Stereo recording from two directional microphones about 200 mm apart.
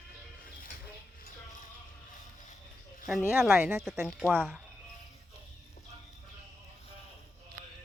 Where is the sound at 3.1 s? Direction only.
5° right (ahead or behind).